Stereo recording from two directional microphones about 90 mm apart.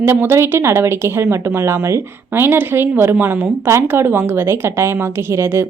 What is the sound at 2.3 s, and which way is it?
A woman's voice, 25° right (ahead or behind).